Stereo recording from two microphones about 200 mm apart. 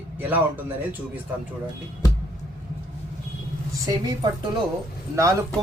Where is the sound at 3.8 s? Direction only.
20° right (ahead or behind).